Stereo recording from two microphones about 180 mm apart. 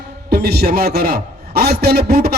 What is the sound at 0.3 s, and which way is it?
A man's voice, 60° right (ahead or behind).